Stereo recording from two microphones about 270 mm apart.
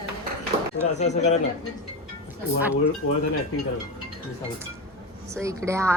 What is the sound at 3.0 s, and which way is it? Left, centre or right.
Speech, left.